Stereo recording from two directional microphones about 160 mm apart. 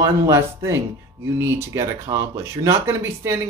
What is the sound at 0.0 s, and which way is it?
Speech, 20° right (ahead or behind).